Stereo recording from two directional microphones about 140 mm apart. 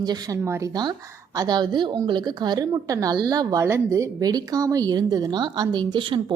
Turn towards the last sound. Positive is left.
turn(degrees=-35)  # may be behind; listen again after turning